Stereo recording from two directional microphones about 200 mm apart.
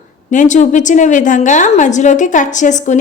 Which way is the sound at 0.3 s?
40° left (ahead or behind).